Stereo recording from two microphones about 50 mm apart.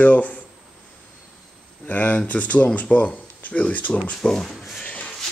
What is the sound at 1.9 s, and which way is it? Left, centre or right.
Speech, left.